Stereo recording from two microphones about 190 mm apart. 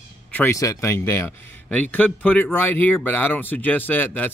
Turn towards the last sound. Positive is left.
turn(degrees=10)  # may be behind; listen again after turning